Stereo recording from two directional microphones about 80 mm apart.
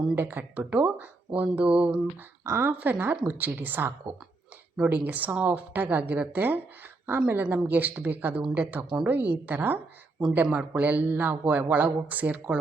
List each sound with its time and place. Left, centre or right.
0.2 s speech: right
2.4 s speech: right
2.7 s speech: right
10.2 s speech: centre